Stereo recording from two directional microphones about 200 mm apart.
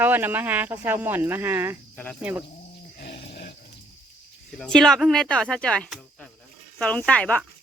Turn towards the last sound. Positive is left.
turn(degrees=5)  # may be behind; listen again after turning